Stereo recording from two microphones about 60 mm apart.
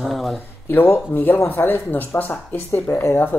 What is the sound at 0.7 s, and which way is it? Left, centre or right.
Speech, left.